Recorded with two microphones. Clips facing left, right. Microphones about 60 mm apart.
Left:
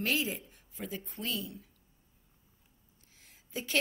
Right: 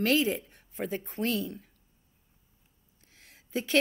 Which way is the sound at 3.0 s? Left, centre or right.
Right.